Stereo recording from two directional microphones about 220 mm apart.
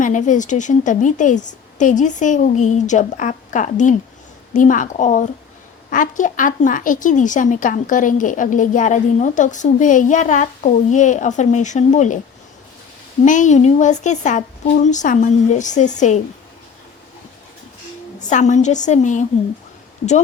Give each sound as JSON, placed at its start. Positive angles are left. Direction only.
{"t": 0.0, "sound": "speech", "side_deg": 35}
{"t": 13.2, "sound": "speech", "side_deg": 35}
{"t": 18.2, "sound": "speech", "side_deg": 35}